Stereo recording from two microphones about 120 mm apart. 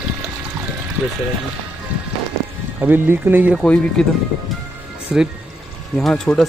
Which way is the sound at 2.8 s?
15° right (ahead or behind).